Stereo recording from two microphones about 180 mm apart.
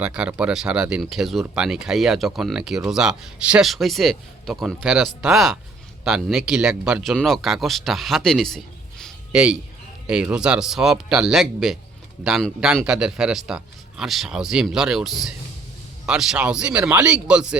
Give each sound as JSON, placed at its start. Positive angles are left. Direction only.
{"t": 0.0, "sound": "speech", "side_deg": -5}